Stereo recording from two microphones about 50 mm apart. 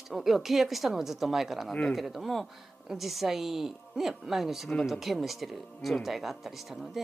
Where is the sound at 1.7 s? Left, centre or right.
Centre.